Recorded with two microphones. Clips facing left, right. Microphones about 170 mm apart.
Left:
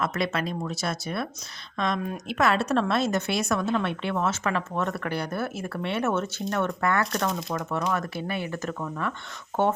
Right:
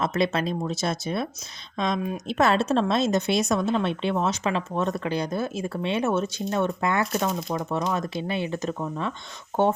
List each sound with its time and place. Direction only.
0.0 s a woman's voice: 25° right (ahead or behind)
2.0 s speech: 5° right (ahead or behind)
2.2 s a woman's voice: 25° right (ahead or behind)
7.3 s speech: centre (ahead or behind)
7.5 s a woman's voice: 15° right (ahead or behind)